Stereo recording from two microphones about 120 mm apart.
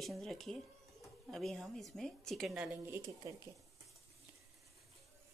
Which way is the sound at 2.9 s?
25° right (ahead or behind).